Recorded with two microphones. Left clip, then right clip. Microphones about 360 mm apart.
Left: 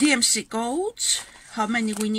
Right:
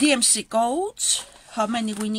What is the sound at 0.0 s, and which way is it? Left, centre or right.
Speech, centre.